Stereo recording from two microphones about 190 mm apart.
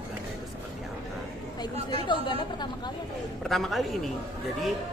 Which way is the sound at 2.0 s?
25° left (ahead or behind).